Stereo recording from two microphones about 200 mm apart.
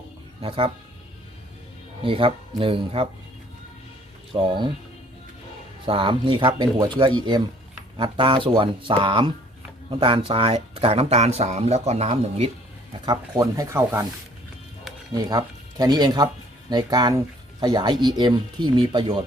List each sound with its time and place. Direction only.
0.4 s speech: 25° right (ahead or behind)
2.0 s speech: 25° right (ahead or behind)
4.4 s speech: 25° right (ahead or behind)
5.8 s speech: 25° right (ahead or behind)
12.9 s speech: 20° right (ahead or behind)
15.1 s speech: 20° right (ahead or behind)